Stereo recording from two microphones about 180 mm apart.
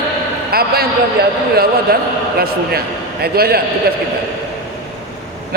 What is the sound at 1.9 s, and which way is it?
Speech, 55° right (ahead or behind).